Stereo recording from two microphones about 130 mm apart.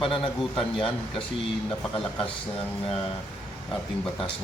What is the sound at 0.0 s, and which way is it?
A man's voice, 45° left (ahead or behind).